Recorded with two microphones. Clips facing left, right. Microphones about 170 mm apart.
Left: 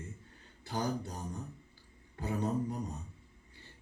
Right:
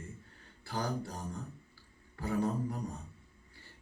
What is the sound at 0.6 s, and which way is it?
Speech, 20° left (ahead or behind).